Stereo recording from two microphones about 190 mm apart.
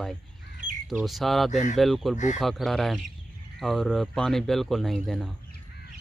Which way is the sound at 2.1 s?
40° left (ahead or behind).